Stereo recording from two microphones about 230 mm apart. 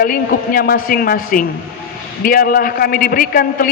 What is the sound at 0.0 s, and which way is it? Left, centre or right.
A man's voice, left.